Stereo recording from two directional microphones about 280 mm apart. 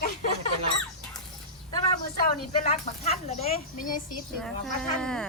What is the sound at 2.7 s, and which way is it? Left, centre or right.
Speech, left.